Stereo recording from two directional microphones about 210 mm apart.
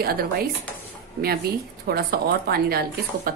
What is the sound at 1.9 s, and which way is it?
Speech, 50° right (ahead or behind).